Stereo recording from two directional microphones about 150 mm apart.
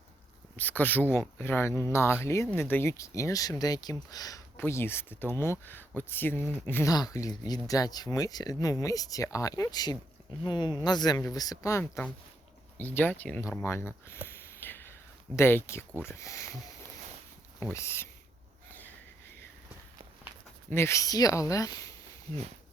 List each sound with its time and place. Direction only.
0.5 s speech: 10° left (ahead or behind)
14.6 s whispering: 15° left (ahead or behind)
15.4 s speech: 15° left (ahead or behind)
17.6 s speech: 15° left (ahead or behind)
20.7 s speech: 15° left (ahead or behind)